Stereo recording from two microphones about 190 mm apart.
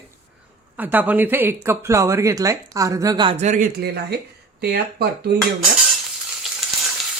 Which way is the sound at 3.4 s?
40° right (ahead or behind).